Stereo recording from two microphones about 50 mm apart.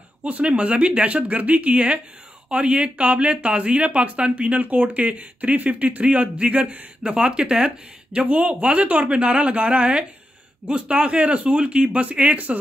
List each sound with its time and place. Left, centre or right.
0.2 s speech: right